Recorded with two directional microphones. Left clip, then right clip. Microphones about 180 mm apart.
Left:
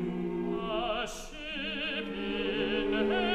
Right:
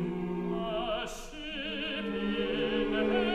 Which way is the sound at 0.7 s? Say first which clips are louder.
Left 1 dB; 65° left (ahead or behind).